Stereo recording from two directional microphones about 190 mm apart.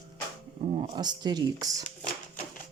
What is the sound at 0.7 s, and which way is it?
Speech, 25° right (ahead or behind).